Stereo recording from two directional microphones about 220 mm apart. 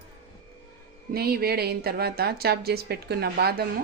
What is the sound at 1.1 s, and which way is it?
Speech, 45° right (ahead or behind).